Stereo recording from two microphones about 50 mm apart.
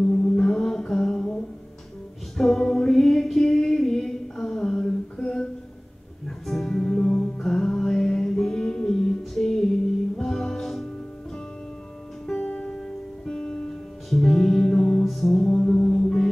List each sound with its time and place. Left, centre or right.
0.0 s music: centre
12.4 s music: left
12.8 s music: centre